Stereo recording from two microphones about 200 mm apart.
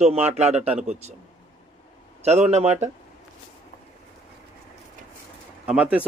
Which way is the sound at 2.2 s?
35° right (ahead or behind).